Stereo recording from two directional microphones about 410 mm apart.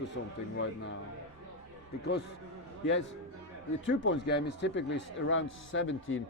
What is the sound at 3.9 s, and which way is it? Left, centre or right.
A man's voice, left.